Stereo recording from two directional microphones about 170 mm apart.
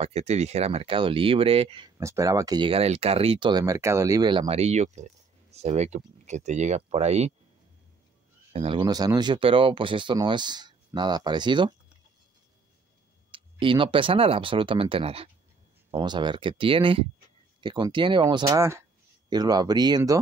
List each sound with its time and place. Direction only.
0.0 s speech: 40° right (ahead or behind)
2.0 s speech: 20° right (ahead or behind); by 7.3 s 40° right (ahead or behind)
8.5 s speech: 30° right (ahead or behind)
13.3 s speech: 30° right (ahead or behind)